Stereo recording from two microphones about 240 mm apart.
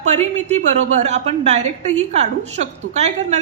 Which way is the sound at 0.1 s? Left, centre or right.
Right.